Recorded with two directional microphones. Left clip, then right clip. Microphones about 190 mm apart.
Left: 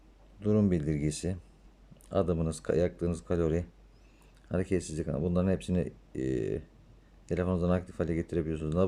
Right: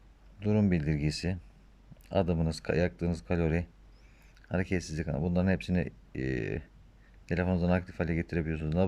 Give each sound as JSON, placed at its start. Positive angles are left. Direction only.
{"t": 0.3, "sound": "speech", "side_deg": 15}